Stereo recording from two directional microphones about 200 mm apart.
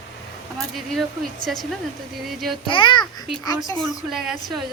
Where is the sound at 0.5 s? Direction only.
Centre (ahead or behind).